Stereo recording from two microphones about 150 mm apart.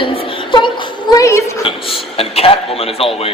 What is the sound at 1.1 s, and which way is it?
Speech, 20° left (ahead or behind).